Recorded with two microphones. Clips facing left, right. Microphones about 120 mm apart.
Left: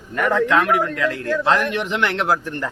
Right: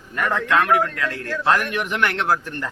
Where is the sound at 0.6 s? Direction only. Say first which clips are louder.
Left 1 dB; 20° left (ahead or behind).